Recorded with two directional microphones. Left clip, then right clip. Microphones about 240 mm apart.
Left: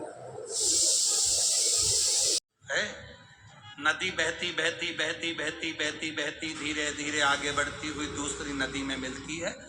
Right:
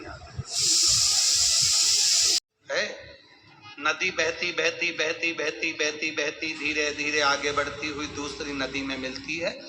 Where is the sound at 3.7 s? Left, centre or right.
Right.